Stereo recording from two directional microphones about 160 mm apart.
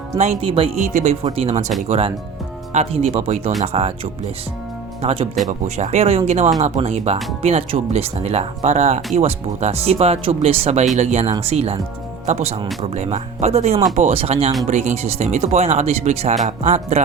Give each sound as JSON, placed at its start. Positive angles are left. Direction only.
{"t": 0.2, "sound": "speech", "side_deg": -40}
{"t": 0.9, "sound": "speech", "side_deg": -50}
{"t": 5.0, "sound": "speech", "side_deg": -40}